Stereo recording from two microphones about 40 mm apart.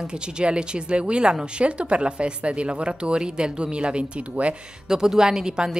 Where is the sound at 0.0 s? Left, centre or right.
Right.